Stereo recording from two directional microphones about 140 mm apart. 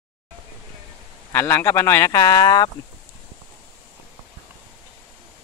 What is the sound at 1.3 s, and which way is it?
Speech, 15° left (ahead or behind).